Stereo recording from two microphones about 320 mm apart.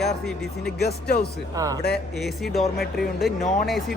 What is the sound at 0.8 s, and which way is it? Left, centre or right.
Speech, left.